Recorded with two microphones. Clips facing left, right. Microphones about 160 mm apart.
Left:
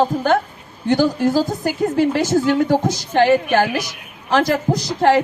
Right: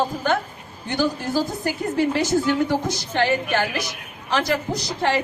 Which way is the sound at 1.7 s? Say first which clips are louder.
Left 5 dB; 45° left (ahead or behind).